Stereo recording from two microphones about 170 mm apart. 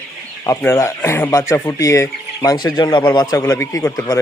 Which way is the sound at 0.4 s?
15° left (ahead or behind).